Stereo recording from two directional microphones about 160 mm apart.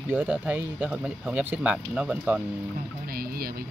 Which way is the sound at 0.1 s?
10° right (ahead or behind).